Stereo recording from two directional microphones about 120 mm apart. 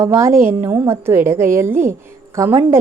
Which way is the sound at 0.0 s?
25° right (ahead or behind).